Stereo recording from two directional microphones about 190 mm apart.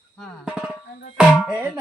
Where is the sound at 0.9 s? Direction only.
45° left (ahead or behind).